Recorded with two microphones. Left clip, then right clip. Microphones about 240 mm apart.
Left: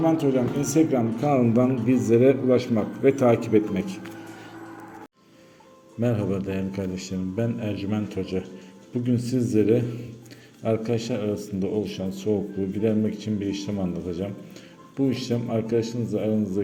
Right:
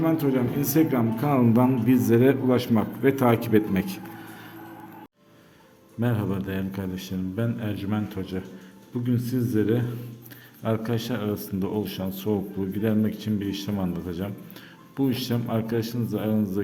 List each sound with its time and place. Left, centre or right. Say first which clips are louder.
0.0 s speech: left 2 dB; centre
6.0 s speech: left 3 dB; centre